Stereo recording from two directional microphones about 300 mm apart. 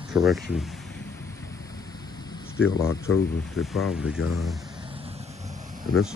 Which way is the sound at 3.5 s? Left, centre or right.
Centre.